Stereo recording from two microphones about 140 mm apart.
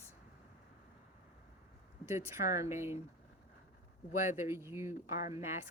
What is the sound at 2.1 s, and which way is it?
Speech, 15° right (ahead or behind).